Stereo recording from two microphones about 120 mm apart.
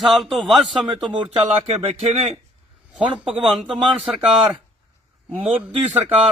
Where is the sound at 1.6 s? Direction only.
55° right (ahead or behind).